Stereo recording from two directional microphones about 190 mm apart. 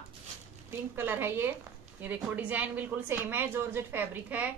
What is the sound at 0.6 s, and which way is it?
A woman's voice, 10° right (ahead or behind).